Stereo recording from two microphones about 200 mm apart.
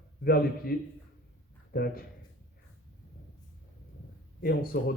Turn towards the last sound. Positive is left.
turn(degrees=50)  # may be behind; listen again after turning